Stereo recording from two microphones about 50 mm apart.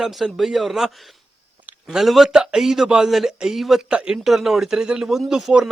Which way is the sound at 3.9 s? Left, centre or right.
Centre.